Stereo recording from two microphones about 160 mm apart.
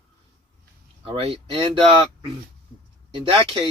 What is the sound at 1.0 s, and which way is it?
Speech, 35° right (ahead or behind).